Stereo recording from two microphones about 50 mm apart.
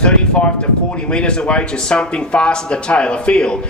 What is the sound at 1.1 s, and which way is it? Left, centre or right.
Speech, centre.